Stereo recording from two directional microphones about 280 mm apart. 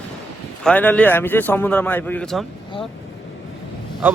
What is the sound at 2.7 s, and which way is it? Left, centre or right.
Vehicle, centre.